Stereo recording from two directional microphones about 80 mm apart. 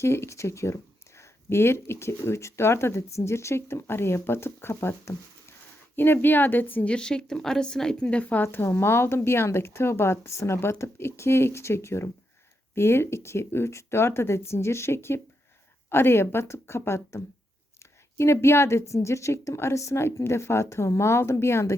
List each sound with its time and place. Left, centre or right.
0.0 s speech: left
6.9 s speech: centre; by 21.8 s left